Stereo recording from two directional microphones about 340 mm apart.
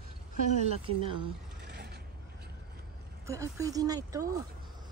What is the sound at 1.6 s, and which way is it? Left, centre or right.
Mechanisms, right.